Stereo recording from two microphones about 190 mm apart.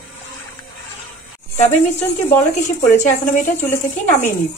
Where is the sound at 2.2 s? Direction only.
40° left (ahead or behind).